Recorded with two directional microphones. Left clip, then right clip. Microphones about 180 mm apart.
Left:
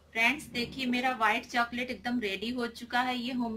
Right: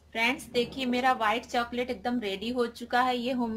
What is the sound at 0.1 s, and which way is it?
A woman's voice, 45° right (ahead or behind).